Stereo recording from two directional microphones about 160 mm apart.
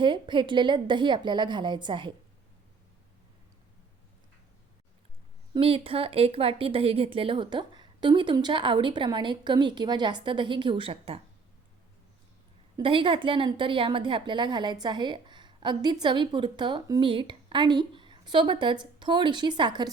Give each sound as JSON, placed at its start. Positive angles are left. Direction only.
{"t": 0.0, "sound": "a woman's voice", "side_deg": -30}
{"t": 5.5, "sound": "speech", "side_deg": -35}
{"t": 12.7, "sound": "a woman's voice", "side_deg": -30}